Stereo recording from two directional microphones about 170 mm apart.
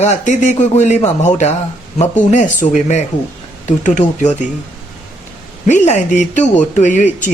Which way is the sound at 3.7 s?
45° left (ahead or behind).